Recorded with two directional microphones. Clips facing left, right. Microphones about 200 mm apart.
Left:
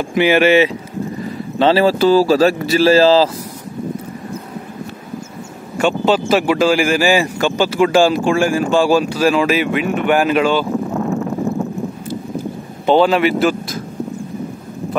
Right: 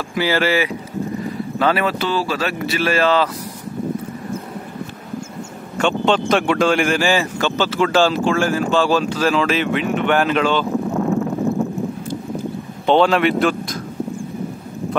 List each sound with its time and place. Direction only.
0.0 s speech: 20° left (ahead or behind)
5.8 s speech: 5° left (ahead or behind)
12.8 s speech: 5° left (ahead or behind)